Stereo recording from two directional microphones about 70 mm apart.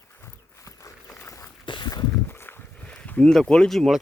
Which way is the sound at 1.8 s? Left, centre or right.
Left.